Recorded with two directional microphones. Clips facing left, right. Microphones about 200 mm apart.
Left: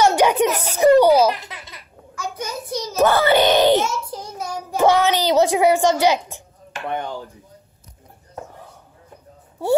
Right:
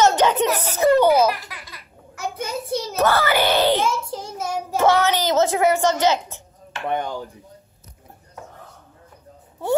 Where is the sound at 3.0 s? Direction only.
15° left (ahead or behind).